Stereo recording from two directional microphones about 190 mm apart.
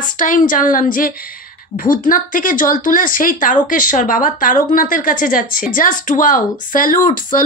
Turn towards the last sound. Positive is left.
turn(degrees=45)  # may be behind; listen again after turning